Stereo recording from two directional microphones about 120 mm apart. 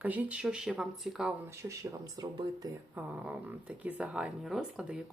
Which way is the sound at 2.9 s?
15° right (ahead or behind).